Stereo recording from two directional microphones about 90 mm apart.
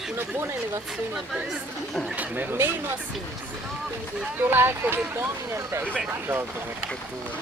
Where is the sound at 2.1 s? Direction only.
20° right (ahead or behind).